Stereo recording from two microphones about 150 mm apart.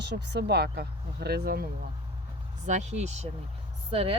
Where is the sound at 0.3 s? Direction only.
90° right.